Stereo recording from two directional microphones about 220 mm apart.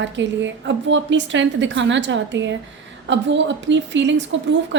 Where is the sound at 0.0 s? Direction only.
55° right (ahead or behind).